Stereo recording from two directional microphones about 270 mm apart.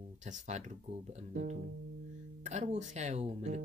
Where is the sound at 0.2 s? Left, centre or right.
Right.